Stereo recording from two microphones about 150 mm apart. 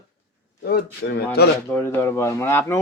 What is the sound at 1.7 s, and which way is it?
Speech, 15° left (ahead or behind).